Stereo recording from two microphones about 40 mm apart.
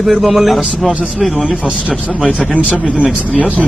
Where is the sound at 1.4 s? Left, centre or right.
Right.